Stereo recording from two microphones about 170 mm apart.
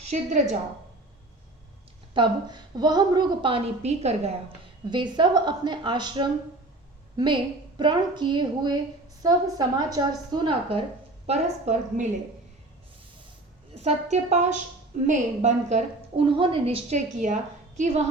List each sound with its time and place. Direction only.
0.1 s a woman's voice: 45° right (ahead or behind)
2.1 s a woman's voice: 25° right (ahead or behind)
4.9 s a woman's voice: 25° right (ahead or behind)
11.3 s a woman's voice: 40° right (ahead or behind)
13.7 s a woman's voice: 40° right (ahead or behind)
16.2 s a woman's voice: 30° right (ahead or behind)
17.2 s a woman's voice: 45° right (ahead or behind)